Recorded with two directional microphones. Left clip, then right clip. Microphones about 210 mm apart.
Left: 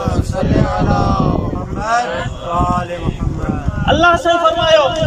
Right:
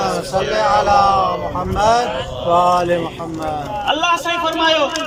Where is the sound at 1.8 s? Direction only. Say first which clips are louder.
Right 2 dB; 25° right (ahead or behind).